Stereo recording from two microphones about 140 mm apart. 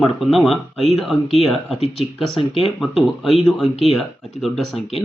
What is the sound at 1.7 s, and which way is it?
Speech, 50° left (ahead or behind).